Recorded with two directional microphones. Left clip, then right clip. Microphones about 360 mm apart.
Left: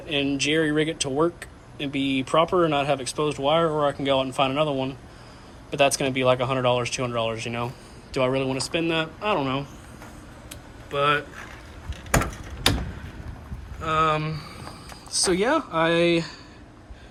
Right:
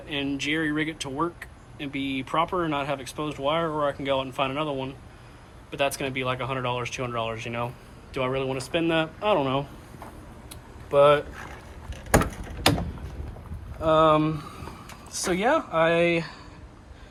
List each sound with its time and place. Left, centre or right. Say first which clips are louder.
0.1 s speech: left 4 dB; centre
10.9 s speech: right 4 dB; centre
12.1 s mechanisms: right 2 dB; right
13.8 s speech: right 3 dB; centre